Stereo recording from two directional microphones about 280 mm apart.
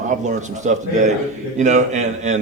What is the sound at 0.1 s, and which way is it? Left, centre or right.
A man's voice, right.